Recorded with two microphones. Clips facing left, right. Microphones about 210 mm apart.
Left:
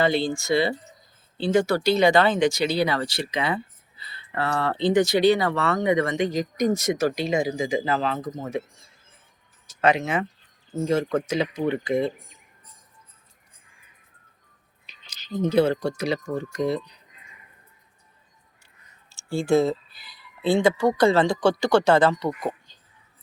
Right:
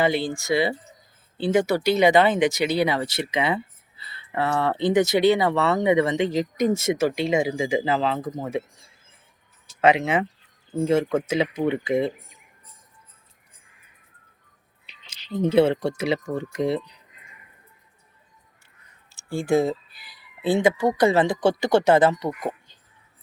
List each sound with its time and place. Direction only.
0.0 s speech: 15° right (ahead or behind)
9.8 s speech: 25° right (ahead or behind)
14.8 s speech: 25° right (ahead or behind)
19.3 s speech: 15° right (ahead or behind)